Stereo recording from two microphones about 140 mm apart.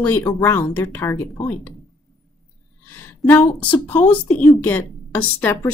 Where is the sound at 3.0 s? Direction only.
15° left (ahead or behind).